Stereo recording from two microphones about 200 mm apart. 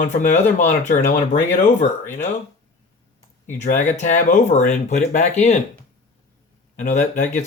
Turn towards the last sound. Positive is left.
turn(degrees=35)  # may be behind; listen again after turning